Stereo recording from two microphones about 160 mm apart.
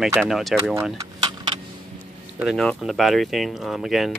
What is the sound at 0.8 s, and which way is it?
Tick-tock, 20° right (ahead or behind).